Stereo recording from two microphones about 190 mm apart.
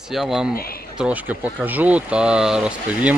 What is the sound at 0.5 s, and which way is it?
Speech, 50° left (ahead or behind).